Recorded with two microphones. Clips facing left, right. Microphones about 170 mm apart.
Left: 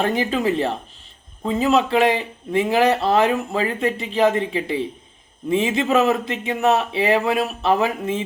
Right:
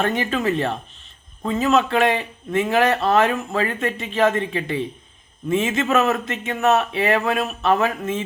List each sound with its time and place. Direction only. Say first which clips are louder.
0.2 s speech: left 1 dB; 15° left (ahead or behind)